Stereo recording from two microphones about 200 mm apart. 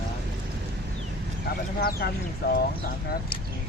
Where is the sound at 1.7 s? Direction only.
50° left (ahead or behind).